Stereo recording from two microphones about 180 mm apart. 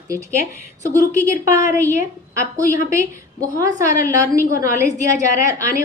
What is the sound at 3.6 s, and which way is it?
A woman's voice, 20° right (ahead or behind).